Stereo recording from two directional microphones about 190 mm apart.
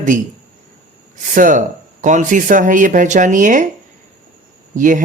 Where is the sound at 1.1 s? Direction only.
45° right (ahead or behind).